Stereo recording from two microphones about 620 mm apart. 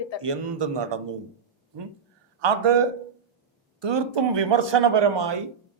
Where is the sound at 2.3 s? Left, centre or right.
Right.